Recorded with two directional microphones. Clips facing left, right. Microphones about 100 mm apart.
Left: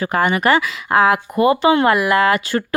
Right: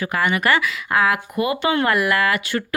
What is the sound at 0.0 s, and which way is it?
Speech, 35° left (ahead or behind).